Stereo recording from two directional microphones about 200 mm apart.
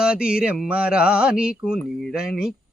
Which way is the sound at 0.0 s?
5° right (ahead or behind).